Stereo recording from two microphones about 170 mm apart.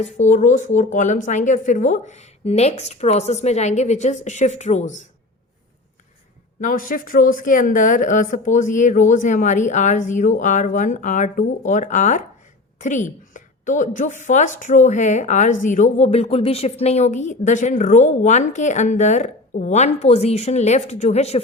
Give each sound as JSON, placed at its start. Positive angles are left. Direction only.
{"t": 0.0, "sound": "speech", "side_deg": 45}
{"t": 6.6, "sound": "speech", "side_deg": 55}